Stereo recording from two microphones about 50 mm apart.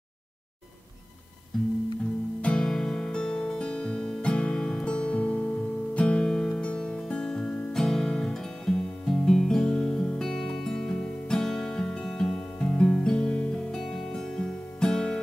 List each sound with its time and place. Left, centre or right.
1.5 s music: centre